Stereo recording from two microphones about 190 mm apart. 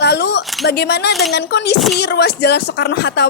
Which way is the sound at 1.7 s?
Centre (ahead or behind).